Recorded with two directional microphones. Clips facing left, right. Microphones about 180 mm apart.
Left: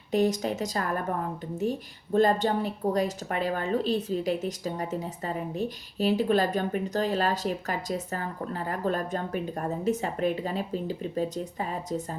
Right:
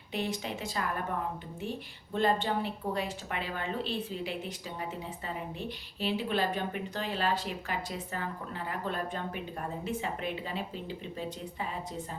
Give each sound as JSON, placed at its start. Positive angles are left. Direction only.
{"t": 0.1, "sound": "a woman's voice", "side_deg": 40}